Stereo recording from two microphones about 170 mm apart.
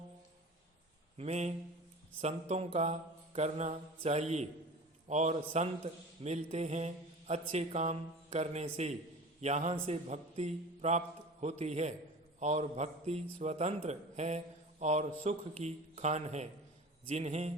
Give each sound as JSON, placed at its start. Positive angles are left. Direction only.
{"t": 1.2, "sound": "a man's voice", "side_deg": -40}